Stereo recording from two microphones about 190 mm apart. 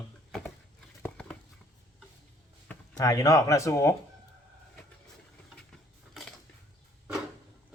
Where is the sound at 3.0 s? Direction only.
20° left (ahead or behind).